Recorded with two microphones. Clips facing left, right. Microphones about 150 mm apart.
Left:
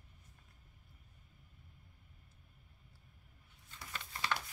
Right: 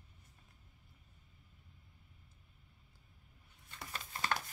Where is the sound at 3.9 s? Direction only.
40° right (ahead or behind).